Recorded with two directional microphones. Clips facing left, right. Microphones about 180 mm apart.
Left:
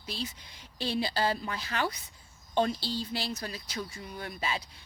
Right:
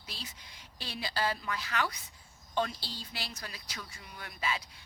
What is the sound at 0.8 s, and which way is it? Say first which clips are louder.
Speech: left 6 dB; 30° left (ahead or behind).